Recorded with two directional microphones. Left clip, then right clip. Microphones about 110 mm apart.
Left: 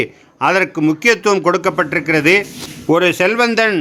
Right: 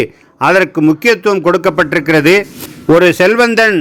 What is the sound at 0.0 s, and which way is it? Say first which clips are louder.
A man's voice: right 4 dB; 40° right (ahead or behind).